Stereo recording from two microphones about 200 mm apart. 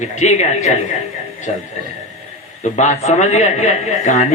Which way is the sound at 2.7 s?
35° left (ahead or behind).